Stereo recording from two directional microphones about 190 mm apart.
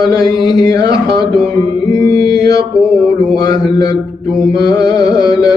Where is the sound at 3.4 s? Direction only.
20° left (ahead or behind).